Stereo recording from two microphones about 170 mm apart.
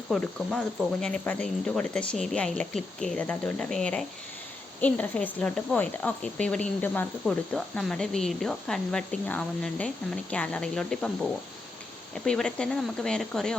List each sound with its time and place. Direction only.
0.1 s speech: 5° left (ahead or behind)